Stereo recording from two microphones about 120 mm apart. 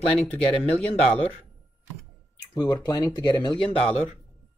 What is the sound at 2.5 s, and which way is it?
Speech, 35° left (ahead or behind).